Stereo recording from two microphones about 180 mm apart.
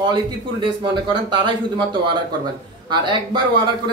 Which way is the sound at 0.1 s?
25° right (ahead or behind).